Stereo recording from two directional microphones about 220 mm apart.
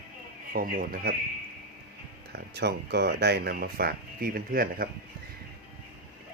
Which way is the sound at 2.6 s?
50° right (ahead or behind).